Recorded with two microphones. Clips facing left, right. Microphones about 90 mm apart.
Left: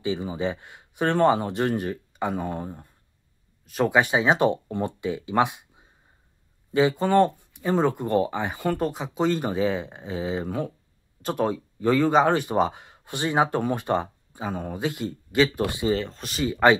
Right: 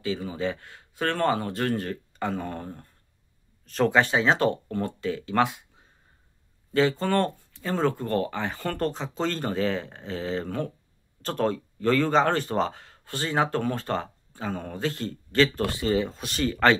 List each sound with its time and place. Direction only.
0.0 s speech: 20° left (ahead or behind)
15.9 s speech: 5° right (ahead or behind)